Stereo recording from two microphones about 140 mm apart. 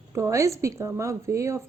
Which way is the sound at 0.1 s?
20° right (ahead or behind).